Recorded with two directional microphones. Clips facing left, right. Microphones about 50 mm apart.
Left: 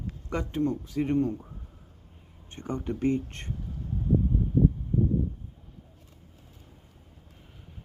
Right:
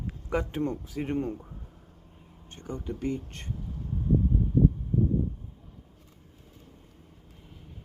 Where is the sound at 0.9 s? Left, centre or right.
Centre.